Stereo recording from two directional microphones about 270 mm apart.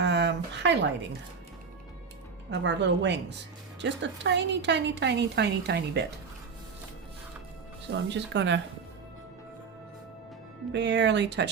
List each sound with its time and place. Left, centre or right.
0.0 s a sound: right
2.5 s a woman's voice: right
8.1 s a woman's voice: right
10.7 s a woman's voice: right